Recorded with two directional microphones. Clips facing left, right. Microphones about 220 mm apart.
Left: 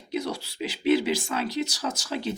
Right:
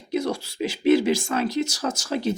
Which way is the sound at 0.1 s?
45° right (ahead or behind).